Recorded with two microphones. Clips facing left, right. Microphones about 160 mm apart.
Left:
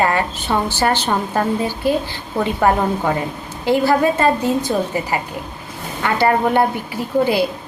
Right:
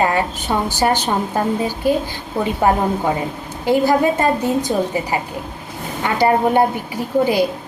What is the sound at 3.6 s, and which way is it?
A woman's voice, 15° right (ahead or behind).